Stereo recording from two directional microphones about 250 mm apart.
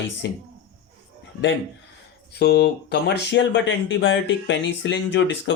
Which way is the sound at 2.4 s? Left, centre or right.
Left.